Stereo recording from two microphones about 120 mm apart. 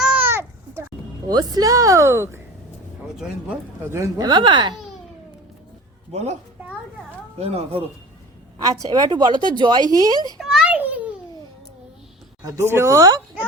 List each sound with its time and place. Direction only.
0.0 s a sound: 10° right (ahead or behind)
0.3 s a sound: 20° right (ahead or behind)
1.3 s a woman's voice: 35° right (ahead or behind)
3.8 s a woman's voice: 25° right (ahead or behind)
4.2 s a woman's voice: 40° right (ahead or behind)
6.1 s a woman's voice: 65° right (ahead or behind)
7.3 s speech: 60° right (ahead or behind)
8.5 s a woman's voice: 30° right (ahead or behind)
10.3 s a sound: 5° right (ahead or behind)
12.5 s a woman's voice: 20° right (ahead or behind)